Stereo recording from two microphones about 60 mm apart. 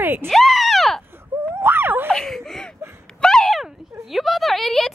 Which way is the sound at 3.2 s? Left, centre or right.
Centre.